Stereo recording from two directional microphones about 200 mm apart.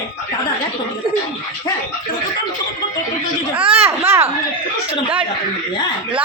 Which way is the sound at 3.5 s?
25° right (ahead or behind).